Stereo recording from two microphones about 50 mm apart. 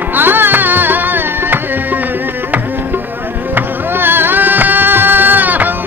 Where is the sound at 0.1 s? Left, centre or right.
Right.